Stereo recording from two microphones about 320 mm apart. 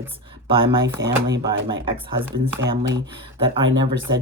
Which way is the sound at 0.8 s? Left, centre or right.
Right.